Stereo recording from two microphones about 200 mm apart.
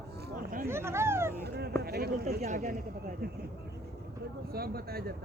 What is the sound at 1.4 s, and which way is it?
Speech, 55° right (ahead or behind).